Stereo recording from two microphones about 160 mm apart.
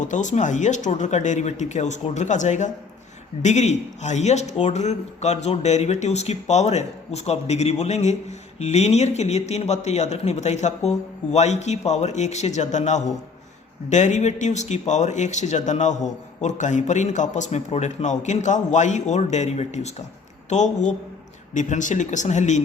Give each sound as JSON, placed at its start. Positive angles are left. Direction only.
{"t": 0.0, "sound": "a man's voice", "side_deg": 50}